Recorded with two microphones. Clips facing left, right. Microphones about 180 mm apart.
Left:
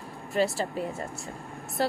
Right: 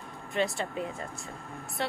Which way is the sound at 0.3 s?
40° left (ahead or behind).